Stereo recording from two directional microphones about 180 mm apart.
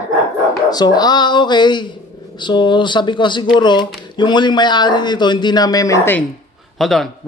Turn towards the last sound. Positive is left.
turn(degrees=0)  # may be behind; listen again after turning